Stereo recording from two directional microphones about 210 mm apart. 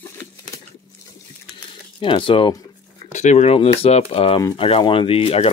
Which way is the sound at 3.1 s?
35° left (ahead or behind).